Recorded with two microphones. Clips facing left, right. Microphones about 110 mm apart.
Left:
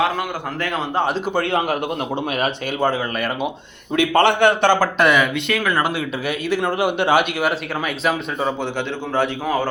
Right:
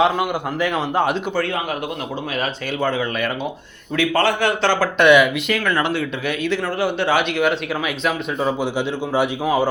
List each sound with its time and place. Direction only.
0.0 s a man's voice: 20° right (ahead or behind)
2.8 s a man's voice: 10° left (ahead or behind)
4.9 s speech: centre (ahead or behind)
8.0 s speech: centre (ahead or behind)
9.1 s a man's voice: 15° right (ahead or behind)